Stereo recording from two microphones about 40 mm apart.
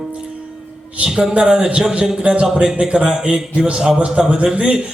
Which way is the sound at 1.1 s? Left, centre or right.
Centre.